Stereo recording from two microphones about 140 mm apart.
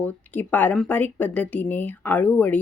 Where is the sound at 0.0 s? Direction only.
10° left (ahead or behind).